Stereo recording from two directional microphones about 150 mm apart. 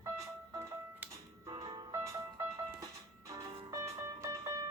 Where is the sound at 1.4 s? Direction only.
35° right (ahead or behind).